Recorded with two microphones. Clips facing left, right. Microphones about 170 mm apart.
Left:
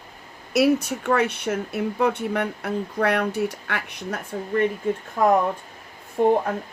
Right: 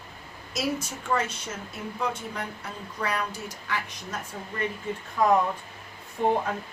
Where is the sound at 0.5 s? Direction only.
65° left (ahead or behind).